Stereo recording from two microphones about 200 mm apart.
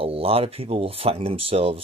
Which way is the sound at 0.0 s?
30° right (ahead or behind).